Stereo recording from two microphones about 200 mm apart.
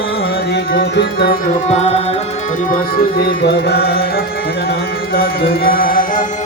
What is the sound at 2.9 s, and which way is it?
Music, 55° left (ahead or behind).